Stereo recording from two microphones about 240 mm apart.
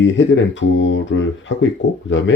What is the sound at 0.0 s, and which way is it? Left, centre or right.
Speech, left.